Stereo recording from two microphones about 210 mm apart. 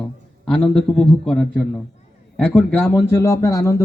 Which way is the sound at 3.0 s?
15° left (ahead or behind).